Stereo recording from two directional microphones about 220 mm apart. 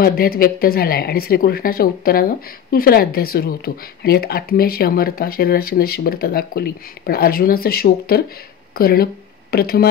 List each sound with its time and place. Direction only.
0.0 s speech: 40° left (ahead or behind)